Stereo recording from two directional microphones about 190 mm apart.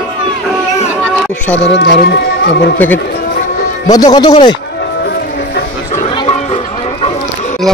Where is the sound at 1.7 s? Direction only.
60° left (ahead or behind).